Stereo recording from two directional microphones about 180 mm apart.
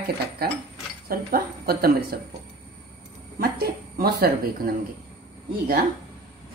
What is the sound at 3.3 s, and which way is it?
Speech, 60° right (ahead or behind).